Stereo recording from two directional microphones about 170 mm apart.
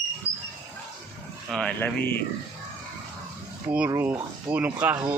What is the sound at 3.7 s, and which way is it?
Speech, 10° right (ahead or behind).